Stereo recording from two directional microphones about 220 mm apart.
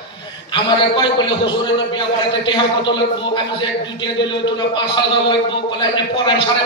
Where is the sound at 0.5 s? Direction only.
20° left (ahead or behind).